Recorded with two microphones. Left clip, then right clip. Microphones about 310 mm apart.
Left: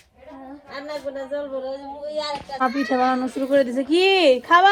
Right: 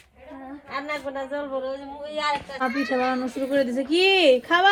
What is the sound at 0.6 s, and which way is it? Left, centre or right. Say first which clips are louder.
A woman's voice: right 1 dB; centre.